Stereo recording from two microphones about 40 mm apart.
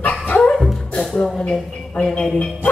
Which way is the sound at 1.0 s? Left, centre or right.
Centre.